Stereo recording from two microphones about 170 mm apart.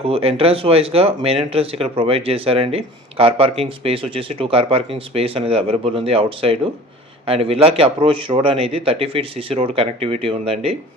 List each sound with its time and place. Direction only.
0.0 s speech: 35° right (ahead or behind)